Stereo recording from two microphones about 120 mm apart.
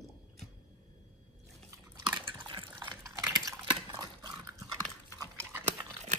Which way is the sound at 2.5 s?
45° right (ahead or behind).